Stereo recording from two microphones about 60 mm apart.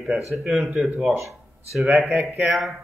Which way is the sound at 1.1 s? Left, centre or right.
Right.